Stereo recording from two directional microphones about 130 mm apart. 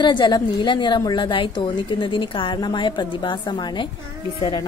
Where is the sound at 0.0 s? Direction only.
35° left (ahead or behind).